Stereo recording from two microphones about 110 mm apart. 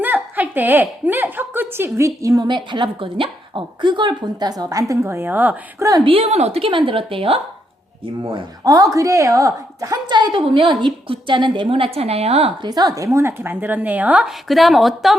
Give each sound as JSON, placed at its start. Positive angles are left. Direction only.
{"t": 0.0, "sound": "speech", "side_deg": -15}
{"t": 2.5, "sound": "speech", "side_deg": -45}
{"t": 6.1, "sound": "a woman's voice", "side_deg": -70}
{"t": 8.6, "sound": "a woman's voice", "side_deg": -30}
{"t": 12.6, "sound": "speech", "side_deg": -35}
{"t": 13.1, "sound": "speech", "side_deg": -25}
{"t": 14.4, "sound": "a woman's voice", "side_deg": 0}